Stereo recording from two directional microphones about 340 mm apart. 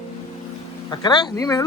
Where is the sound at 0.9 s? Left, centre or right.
Centre.